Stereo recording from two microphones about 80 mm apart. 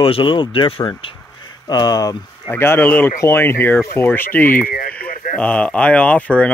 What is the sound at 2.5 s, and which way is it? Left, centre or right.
Speech, left.